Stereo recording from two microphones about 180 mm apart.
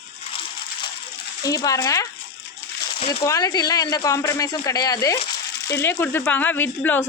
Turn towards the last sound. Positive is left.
turn(degrees=10)  # may be behind; listen again after turning